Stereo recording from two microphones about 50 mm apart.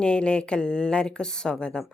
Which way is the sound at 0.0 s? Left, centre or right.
Centre.